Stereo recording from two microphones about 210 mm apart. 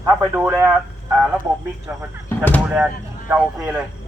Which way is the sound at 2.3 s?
10° left (ahead or behind).